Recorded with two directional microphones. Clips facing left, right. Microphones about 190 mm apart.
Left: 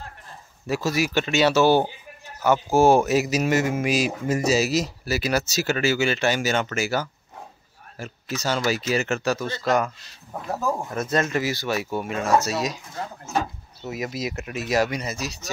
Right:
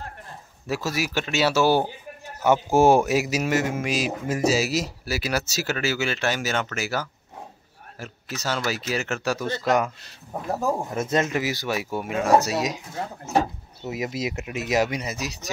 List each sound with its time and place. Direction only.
0.7 s speech: 5° right (ahead or behind)
2.4 s speech: 20° right (ahead or behind)
10.7 s speech: 15° right (ahead or behind)
13.8 s speech: 20° right (ahead or behind)